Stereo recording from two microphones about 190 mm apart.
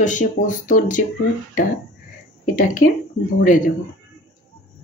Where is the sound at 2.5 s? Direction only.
45° left (ahead or behind).